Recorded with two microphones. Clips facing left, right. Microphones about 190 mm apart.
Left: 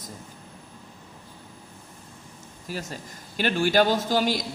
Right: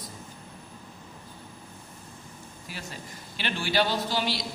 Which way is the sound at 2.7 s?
40° left (ahead or behind).